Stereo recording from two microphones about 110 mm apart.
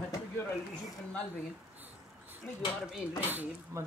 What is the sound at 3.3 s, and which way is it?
Speech, 15° right (ahead or behind).